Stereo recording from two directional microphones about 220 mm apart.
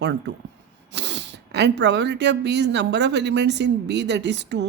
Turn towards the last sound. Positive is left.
turn(degrees=-50)  # may be behind; listen again after turning